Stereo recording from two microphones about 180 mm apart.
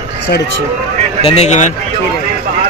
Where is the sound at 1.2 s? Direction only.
35° left (ahead or behind).